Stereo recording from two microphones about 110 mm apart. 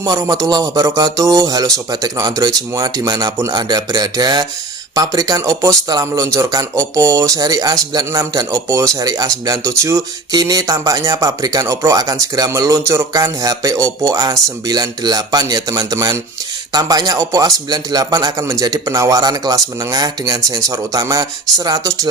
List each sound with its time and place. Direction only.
0.0 s speech: 30° right (ahead or behind)